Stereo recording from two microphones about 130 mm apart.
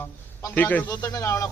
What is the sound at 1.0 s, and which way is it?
Speech, 25° left (ahead or behind).